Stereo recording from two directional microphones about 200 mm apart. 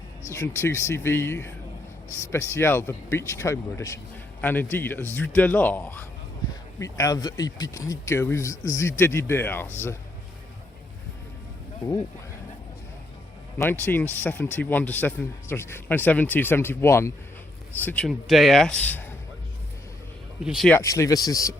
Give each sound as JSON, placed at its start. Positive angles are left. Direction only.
{"t": 0.3, "sound": "speech", "side_deg": 15}
{"t": 11.8, "sound": "speech", "side_deg": 20}
{"t": 13.6, "sound": "speech", "side_deg": 10}
{"t": 20.4, "sound": "speech", "side_deg": 0}
{"t": 20.7, "sound": "speech", "side_deg": 15}